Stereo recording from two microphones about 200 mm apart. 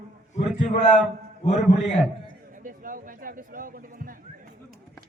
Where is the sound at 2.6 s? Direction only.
45° right (ahead or behind).